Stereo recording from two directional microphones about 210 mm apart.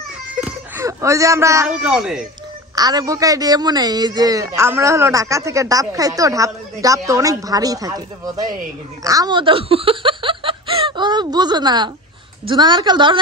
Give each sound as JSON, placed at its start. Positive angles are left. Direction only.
{"t": 0.3, "sound": "a sound", "side_deg": -10}
{"t": 1.9, "sound": "speech", "side_deg": -5}
{"t": 2.7, "sound": "a man's voice", "side_deg": -20}